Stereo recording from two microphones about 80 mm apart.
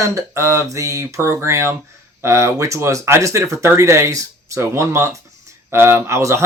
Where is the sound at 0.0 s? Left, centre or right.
Right.